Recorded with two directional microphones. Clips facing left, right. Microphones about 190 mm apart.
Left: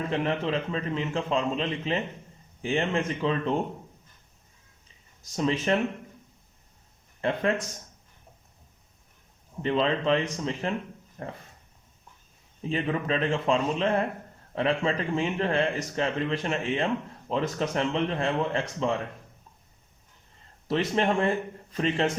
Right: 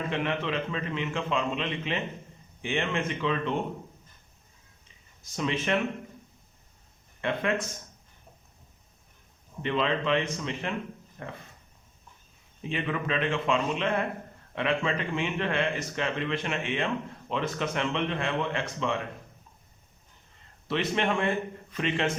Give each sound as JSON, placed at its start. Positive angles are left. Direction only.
{"t": 0.1, "sound": "speech", "side_deg": 35}
{"t": 5.2, "sound": "speech", "side_deg": 35}
{"t": 7.2, "sound": "speech", "side_deg": 35}
{"t": 9.6, "sound": "speech", "side_deg": 35}
{"t": 12.6, "sound": "speech", "side_deg": 35}
{"t": 20.7, "sound": "speech", "side_deg": 35}